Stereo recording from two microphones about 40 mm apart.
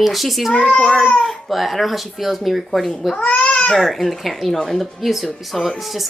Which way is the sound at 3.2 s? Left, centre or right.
Left.